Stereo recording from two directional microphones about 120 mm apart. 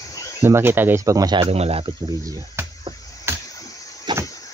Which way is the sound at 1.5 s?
55° right (ahead or behind).